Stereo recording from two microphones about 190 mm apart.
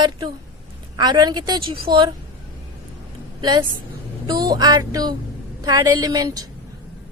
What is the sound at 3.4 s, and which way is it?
A woman's voice, 20° right (ahead or behind).